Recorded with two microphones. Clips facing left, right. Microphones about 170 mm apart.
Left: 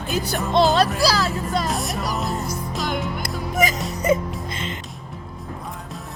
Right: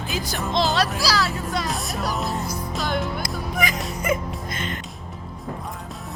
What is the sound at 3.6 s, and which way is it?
Music, 35° left (ahead or behind).